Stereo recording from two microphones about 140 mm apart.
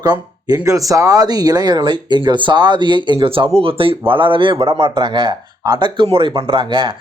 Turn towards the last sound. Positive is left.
turn(degrees=-35)  # may be behind; listen again after turning